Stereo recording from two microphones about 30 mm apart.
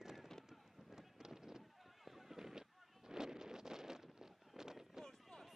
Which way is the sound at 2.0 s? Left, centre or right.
Centre.